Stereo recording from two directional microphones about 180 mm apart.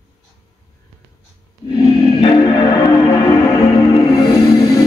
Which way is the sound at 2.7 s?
20° left (ahead or behind).